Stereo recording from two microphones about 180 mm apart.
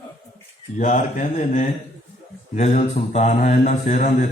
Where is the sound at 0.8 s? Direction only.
45° left (ahead or behind).